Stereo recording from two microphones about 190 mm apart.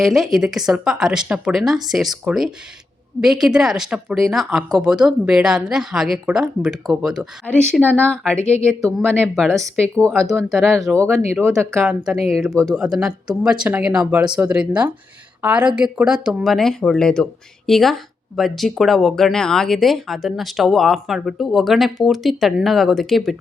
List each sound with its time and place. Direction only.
0.0 s speech: centre (ahead or behind)
10.9 s speech: 15° right (ahead or behind)
12.7 s speech: centre (ahead or behind)